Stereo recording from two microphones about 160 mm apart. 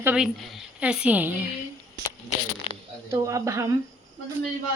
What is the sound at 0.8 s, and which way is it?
Speech, 5° right (ahead or behind).